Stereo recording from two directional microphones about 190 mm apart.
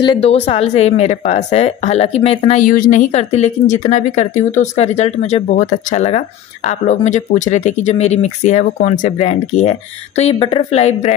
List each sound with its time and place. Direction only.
0.0 s speech: 30° left (ahead or behind)
2.6 s speech: 45° left (ahead or behind)